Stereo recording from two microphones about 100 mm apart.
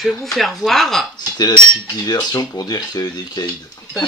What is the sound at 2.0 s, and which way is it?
Speech, 40° left (ahead or behind).